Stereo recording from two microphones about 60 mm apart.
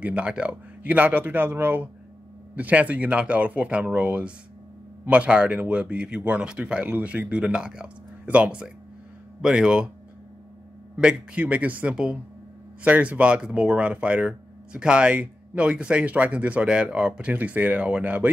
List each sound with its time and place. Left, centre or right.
0.0 s speech: right
2.5 s speech: right
11.0 s speech: centre